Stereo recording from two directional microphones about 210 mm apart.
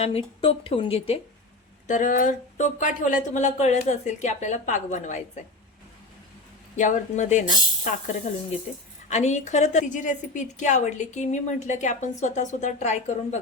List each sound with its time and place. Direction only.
0.0 s speech: 25° left (ahead or behind)
1.9 s a woman's voice: 40° left (ahead or behind)
6.7 s a woman's voice: 35° left (ahead or behind)